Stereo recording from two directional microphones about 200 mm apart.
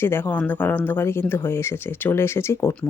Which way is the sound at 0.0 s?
10° left (ahead or behind).